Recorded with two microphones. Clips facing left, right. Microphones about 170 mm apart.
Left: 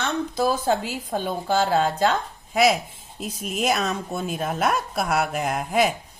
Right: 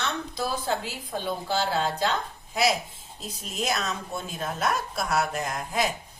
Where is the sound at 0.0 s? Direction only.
45° left (ahead or behind).